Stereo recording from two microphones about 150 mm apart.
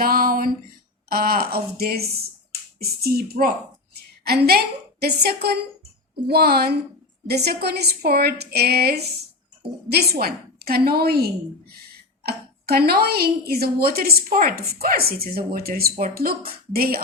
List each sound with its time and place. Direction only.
0.0 s a sound: 75° right (ahead or behind)
1.1 s a woman's voice: 80° right
12.2 s a woman's voice: 90° right